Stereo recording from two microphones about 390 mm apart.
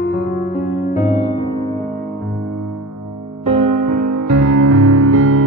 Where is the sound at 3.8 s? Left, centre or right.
Right.